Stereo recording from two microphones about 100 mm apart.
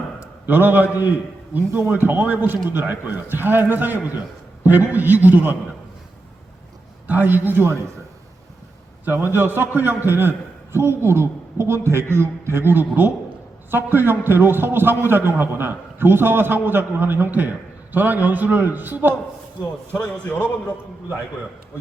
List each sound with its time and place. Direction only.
0.2 s a man's voice: 20° right (ahead or behind)
7.1 s a man's voice: 20° right (ahead or behind)
9.3 s a man's voice: 20° right (ahead or behind)